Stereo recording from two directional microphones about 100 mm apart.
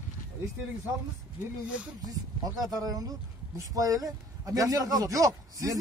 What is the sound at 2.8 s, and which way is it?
Speech, 40° right (ahead or behind).